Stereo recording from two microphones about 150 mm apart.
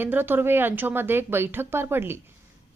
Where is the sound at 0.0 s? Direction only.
15° right (ahead or behind).